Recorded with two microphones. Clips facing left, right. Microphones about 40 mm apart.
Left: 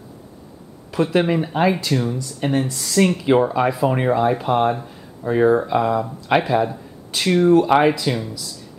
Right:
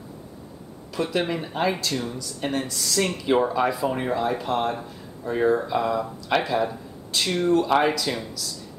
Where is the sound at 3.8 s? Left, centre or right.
Left.